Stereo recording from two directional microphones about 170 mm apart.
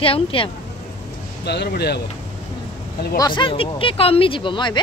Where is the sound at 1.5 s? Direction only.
75° left (ahead or behind).